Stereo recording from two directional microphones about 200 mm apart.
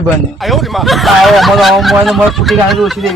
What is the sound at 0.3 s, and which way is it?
A man's voice, centre (ahead or behind).